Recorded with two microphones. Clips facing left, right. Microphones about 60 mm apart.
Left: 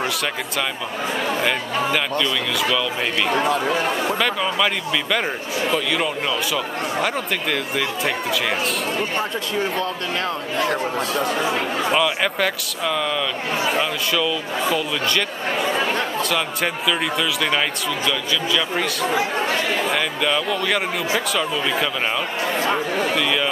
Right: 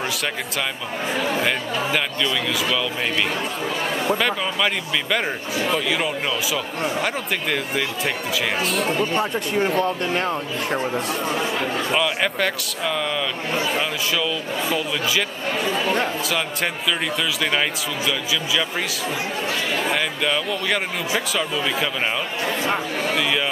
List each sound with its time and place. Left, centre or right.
1.2 s speech: centre
4.1 s speech: centre
9.5 s speech: right
11.9 s speech: centre
16.3 s speech: centre
19.9 s speech: centre
23.1 s speech: centre